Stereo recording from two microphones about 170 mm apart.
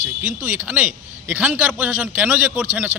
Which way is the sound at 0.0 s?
10° right (ahead or behind).